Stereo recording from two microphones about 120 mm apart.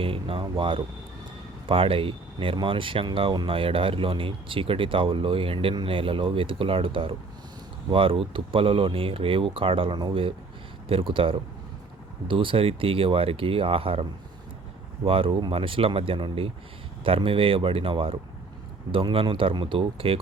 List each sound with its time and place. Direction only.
0.0 s speech: 50° right (ahead or behind)